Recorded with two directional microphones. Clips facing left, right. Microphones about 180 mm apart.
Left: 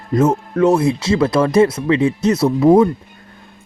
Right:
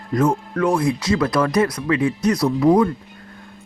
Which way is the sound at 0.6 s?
25° left (ahead or behind).